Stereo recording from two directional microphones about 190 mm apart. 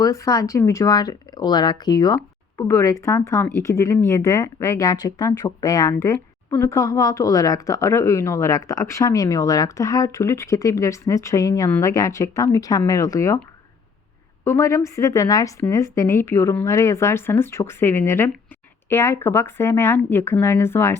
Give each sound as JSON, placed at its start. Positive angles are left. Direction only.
{"t": 0.0, "sound": "speech", "side_deg": 15}
{"t": 14.4, "sound": "speech", "side_deg": 15}